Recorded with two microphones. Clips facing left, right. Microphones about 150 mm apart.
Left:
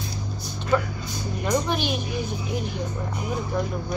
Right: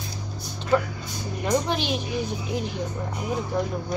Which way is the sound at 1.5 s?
25° right (ahead or behind).